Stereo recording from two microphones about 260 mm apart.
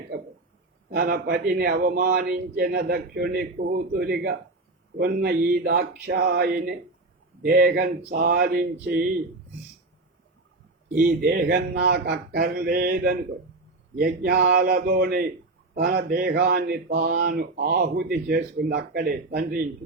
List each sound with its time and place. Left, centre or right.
0.9 s speech: right
10.9 s speech: right